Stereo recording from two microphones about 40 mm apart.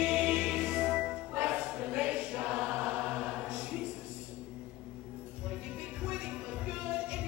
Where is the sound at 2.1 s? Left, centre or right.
Right.